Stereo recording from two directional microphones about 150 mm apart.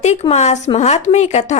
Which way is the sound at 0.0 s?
50° left (ahead or behind).